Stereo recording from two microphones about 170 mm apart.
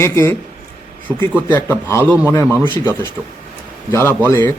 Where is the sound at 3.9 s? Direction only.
15° left (ahead or behind).